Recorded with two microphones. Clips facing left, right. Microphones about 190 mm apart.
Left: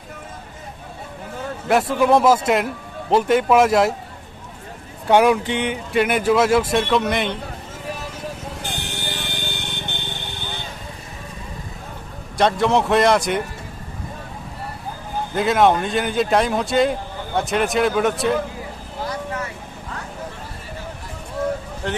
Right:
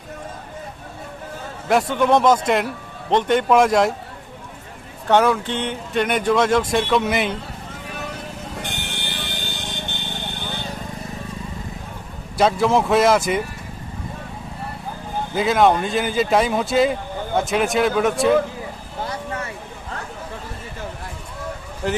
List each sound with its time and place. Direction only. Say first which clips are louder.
1.6 s speech: left 1 dB; 5° left (ahead or behind)
5.0 s speech: left 2 dB; 10° left (ahead or behind); by 7.3 s 5° right (ahead or behind)
8.9 s vehicle: left 1 dB; 40° left (ahead or behind)
12.4 s speech: even; centre (ahead or behind)
15.4 s speech: even; centre (ahead or behind)
21.8 s speech: right 3 dB; 5° right (ahead or behind)